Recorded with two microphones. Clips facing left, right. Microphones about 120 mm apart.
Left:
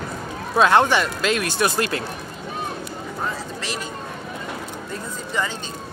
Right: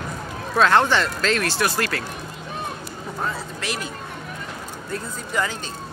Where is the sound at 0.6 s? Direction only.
15° left (ahead or behind).